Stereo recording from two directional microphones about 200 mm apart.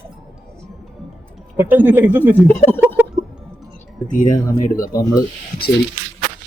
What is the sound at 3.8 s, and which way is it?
Music, 40° left (ahead or behind).